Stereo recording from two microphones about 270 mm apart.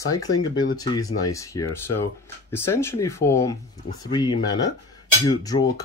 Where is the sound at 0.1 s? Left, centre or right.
Centre.